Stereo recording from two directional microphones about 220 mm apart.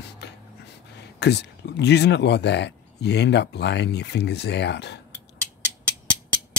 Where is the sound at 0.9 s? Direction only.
50° left (ahead or behind).